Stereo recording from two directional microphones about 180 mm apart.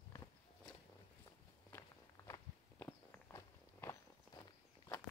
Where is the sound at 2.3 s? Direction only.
15° left (ahead or behind).